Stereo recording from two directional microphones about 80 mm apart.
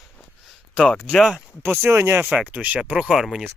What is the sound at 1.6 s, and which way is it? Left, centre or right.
Speech, right.